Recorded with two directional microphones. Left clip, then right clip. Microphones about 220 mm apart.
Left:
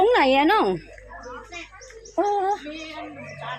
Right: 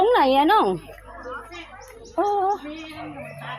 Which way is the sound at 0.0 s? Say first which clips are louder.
Even; 5° right (ahead or behind).